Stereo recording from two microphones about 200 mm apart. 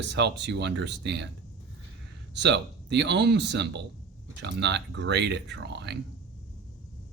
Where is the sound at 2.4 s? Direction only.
60° right (ahead or behind).